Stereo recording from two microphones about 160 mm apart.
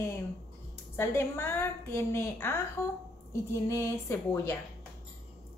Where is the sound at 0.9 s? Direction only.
15° left (ahead or behind).